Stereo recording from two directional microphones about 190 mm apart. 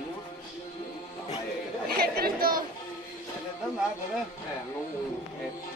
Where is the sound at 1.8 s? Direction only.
55° right (ahead or behind).